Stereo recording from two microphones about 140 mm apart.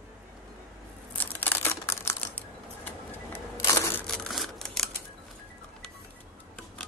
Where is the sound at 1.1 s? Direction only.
15° left (ahead or behind).